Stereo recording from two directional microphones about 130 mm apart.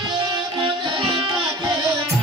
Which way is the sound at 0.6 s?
40° right (ahead or behind).